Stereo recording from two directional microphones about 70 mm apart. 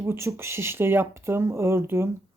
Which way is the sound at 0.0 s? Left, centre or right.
Right.